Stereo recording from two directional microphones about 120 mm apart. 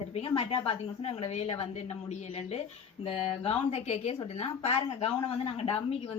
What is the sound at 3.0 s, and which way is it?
A woman's voice, 55° left (ahead or behind).